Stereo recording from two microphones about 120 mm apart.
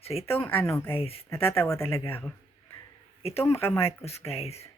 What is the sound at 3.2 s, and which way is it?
Speech, 55° left (ahead or behind).